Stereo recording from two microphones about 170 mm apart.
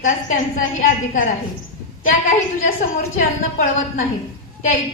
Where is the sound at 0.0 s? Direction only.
50° left (ahead or behind).